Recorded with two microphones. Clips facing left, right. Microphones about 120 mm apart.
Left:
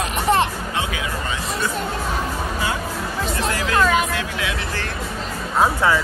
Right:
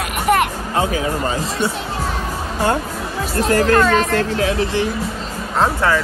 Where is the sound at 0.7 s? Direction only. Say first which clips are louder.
Right 6 dB; 40° right (ahead or behind).